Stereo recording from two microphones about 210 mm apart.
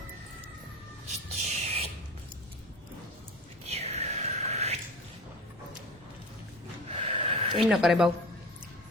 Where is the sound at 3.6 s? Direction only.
30° right (ahead or behind).